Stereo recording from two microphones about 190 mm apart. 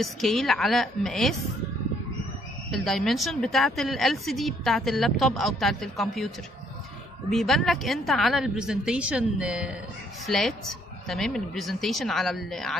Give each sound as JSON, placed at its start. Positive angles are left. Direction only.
{"t": 0.0, "sound": "a woman's voice", "side_deg": 0}
{"t": 2.7, "sound": "a woman's voice", "side_deg": 0}
{"t": 7.2, "sound": "a woman's voice", "side_deg": 0}